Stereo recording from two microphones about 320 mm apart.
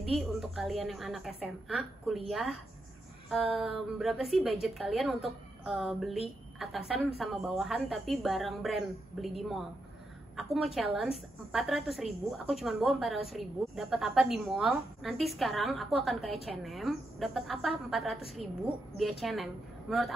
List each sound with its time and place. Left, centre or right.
0.0 s a woman's voice: centre
3.6 s a woman's voice: centre